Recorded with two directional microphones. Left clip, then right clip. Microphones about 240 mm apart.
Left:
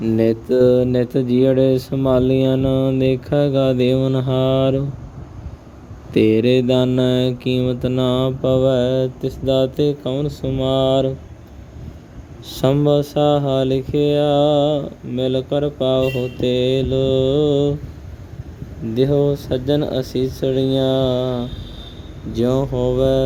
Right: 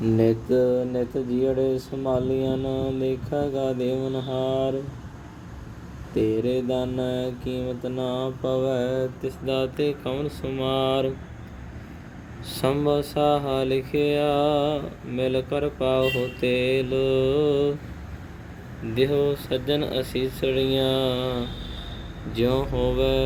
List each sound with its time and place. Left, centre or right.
0.0 s speech: left
6.1 s speech: left
12.5 s speech: left
18.9 s speech: left